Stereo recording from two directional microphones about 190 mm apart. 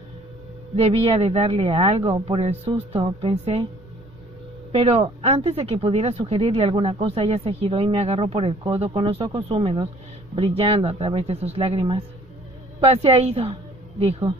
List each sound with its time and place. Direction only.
0.7 s speech: 30° right (ahead or behind)
4.7 s speech: 30° right (ahead or behind)
12.8 s a woman's voice: 30° right (ahead or behind)